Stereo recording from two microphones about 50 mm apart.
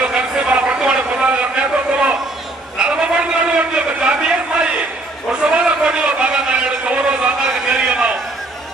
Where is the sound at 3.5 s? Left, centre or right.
Right.